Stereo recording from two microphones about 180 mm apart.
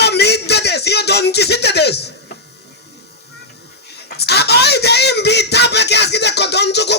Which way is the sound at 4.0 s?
65° left (ahead or behind).